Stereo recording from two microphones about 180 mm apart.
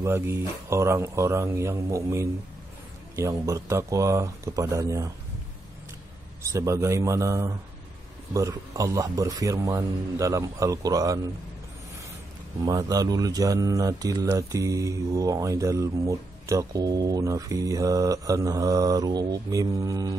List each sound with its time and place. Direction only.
0.0 s a man's voice: 15° right (ahead or behind)
6.4 s a man's voice: 15° right (ahead or behind)
12.6 s speech: 20° right (ahead or behind)